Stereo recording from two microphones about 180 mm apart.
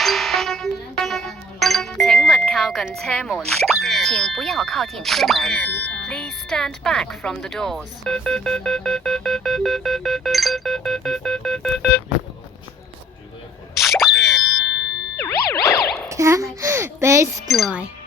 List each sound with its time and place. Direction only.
0.0 s music: centre (ahead or behind)
2.0 s a sound: centre (ahead or behind)
3.5 s speech: centre (ahead or behind)
13.7 s plop: centre (ahead or behind)
15.1 s music: 60° left (ahead or behind)
16.0 s a child's voice: 15° right (ahead or behind)
17.5 s speech: centre (ahead or behind)